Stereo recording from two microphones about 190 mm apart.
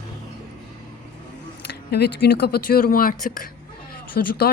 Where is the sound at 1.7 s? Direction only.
60° left (ahead or behind).